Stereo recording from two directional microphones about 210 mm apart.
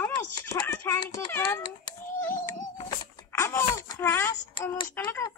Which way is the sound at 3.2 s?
10° left (ahead or behind).